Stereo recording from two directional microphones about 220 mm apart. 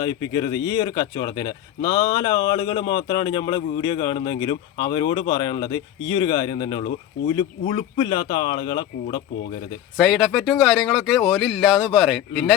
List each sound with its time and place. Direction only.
0.0 s speech: 20° left (ahead or behind)
10.0 s speech: centre (ahead or behind)